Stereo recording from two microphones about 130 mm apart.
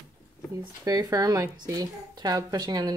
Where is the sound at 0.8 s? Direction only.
25° right (ahead or behind).